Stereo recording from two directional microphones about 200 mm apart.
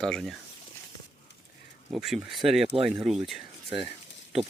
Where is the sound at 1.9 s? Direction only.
Centre (ahead or behind).